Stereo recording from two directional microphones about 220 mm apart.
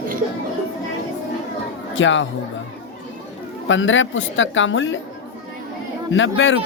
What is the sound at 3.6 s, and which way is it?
A woman's voice, 60° left (ahead or behind).